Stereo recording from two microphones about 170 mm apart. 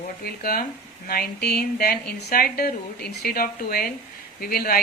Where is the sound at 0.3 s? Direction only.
65° left (ahead or behind).